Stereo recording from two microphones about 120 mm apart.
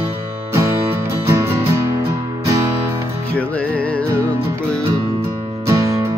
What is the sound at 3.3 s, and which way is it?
Music, 10° left (ahead or behind).